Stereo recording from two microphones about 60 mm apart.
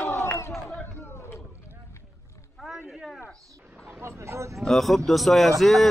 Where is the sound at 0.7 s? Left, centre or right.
Left.